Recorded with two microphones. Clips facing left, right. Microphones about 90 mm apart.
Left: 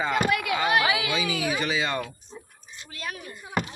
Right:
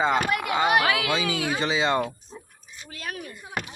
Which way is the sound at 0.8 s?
60° right (ahead or behind).